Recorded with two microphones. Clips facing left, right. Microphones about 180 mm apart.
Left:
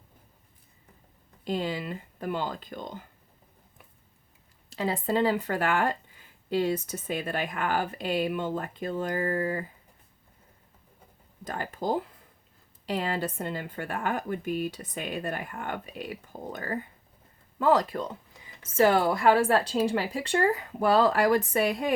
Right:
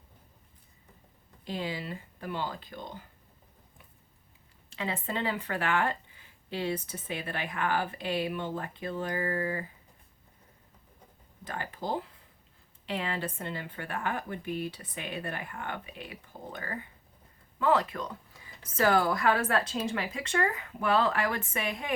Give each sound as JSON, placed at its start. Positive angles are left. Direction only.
{"t": 1.5, "sound": "speech", "side_deg": 45}
{"t": 4.7, "sound": "a woman's voice", "side_deg": 35}
{"t": 11.4, "sound": "a woman's voice", "side_deg": 45}